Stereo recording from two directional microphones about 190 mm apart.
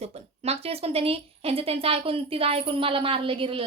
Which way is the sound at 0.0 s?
35° right (ahead or behind).